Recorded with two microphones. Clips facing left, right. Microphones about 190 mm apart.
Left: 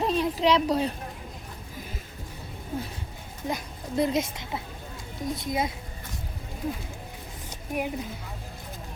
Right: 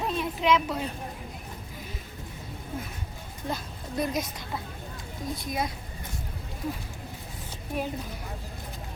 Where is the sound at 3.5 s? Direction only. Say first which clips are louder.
Left 2 dB; 20° left (ahead or behind).